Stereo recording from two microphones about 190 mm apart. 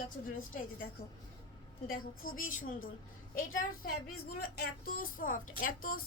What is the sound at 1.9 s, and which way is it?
Speech, 45° left (ahead or behind).